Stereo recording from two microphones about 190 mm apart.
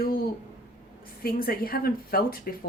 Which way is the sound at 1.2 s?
50° left (ahead or behind).